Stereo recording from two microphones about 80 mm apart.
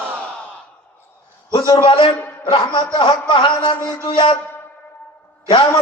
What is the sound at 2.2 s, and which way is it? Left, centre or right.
Speech, centre.